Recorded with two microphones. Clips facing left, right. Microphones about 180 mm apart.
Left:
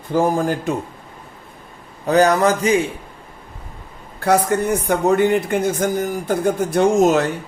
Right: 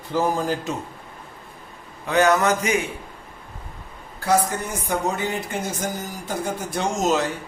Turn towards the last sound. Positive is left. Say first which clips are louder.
# left 8 dB
turn(degrees=55)  # may be behind; listen again after turning